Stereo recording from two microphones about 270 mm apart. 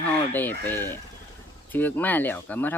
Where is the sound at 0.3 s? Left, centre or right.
Centre.